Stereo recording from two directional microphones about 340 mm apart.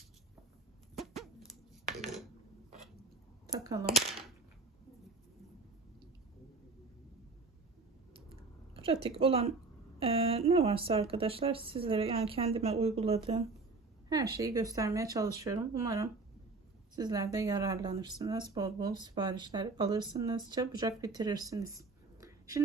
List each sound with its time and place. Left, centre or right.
0.9 s dog: centre
1.8 s dishes: right
3.4 s speech: centre
8.7 s a woman's voice: centre
22.2 s whispering: centre